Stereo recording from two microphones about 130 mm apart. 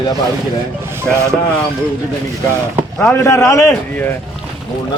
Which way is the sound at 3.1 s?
20° left (ahead or behind).